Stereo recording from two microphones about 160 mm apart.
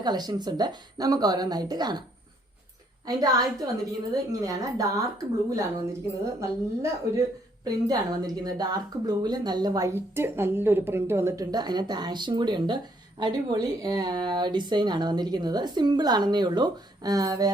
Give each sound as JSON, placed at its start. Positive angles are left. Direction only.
{"t": 0.0, "sound": "a woman's voice", "side_deg": -25}
{"t": 3.1, "sound": "a woman's voice", "side_deg": -25}